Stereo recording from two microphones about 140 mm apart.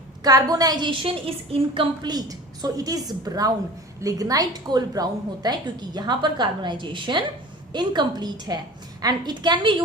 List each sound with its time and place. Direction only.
0.3 s a woman's voice: 25° right (ahead or behind)